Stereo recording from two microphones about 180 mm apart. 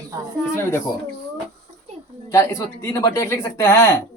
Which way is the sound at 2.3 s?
15° left (ahead or behind).